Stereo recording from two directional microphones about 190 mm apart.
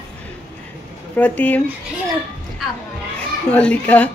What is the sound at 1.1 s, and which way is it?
Speech, 10° left (ahead or behind).